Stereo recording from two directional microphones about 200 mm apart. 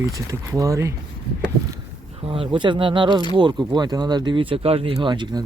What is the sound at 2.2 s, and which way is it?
Speech, 25° right (ahead or behind).